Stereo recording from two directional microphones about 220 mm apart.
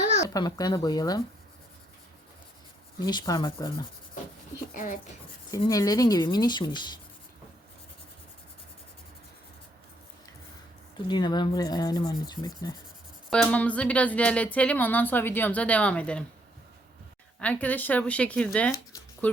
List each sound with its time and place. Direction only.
0.3 s speech: 15° left (ahead or behind)
3.1 s speech: 20° left (ahead or behind)
4.7 s speech: 35° left (ahead or behind)
5.5 s speech: 15° left (ahead or behind)
11.1 s speech: 20° left (ahead or behind)
13.3 s speech: 5° left (ahead or behind)
17.4 s speech: 5° left (ahead or behind)